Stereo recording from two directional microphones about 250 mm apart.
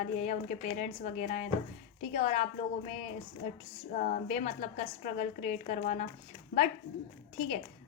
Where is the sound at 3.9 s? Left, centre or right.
Left.